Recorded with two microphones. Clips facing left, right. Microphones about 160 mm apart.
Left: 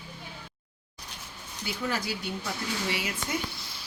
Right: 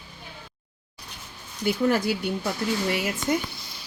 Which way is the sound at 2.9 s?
50° right (ahead or behind).